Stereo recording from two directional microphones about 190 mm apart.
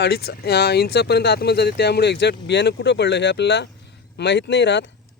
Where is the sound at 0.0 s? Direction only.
55° left (ahead or behind).